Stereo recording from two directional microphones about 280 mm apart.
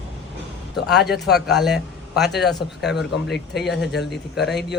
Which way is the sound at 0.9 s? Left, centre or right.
Centre.